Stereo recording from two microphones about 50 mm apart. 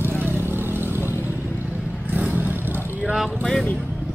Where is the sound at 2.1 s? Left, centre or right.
Right.